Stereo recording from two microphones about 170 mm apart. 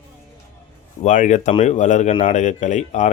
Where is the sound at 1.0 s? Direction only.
45° left (ahead or behind).